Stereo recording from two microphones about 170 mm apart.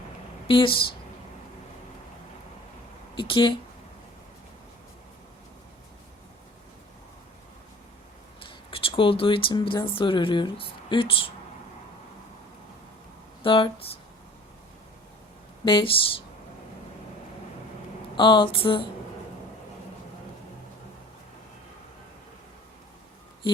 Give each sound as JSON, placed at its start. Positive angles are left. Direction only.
{"t": 0.4, "sound": "speech", "side_deg": 30}
{"t": 3.2, "sound": "a sound", "side_deg": 30}
{"t": 8.4, "sound": "speech", "side_deg": 30}
{"t": 13.4, "sound": "speech", "side_deg": 30}
{"t": 15.6, "sound": "speech", "side_deg": 30}
{"t": 18.2, "sound": "a sound", "side_deg": 30}